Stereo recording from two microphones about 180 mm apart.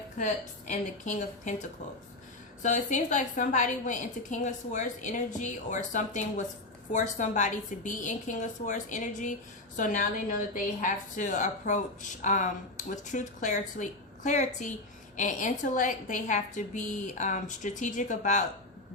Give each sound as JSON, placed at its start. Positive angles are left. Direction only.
{"t": 0.2, "sound": "a woman's voice", "side_deg": 40}